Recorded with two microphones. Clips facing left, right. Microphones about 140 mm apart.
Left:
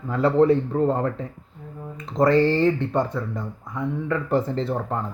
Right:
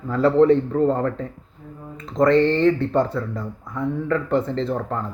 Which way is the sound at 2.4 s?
10° left (ahead or behind).